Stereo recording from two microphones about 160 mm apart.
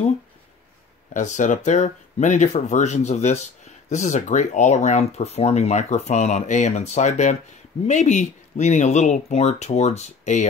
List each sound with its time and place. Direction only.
1.1 s speech: 50° left (ahead or behind)